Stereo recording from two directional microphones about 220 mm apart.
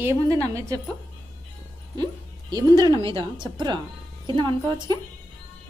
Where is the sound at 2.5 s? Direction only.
20° right (ahead or behind).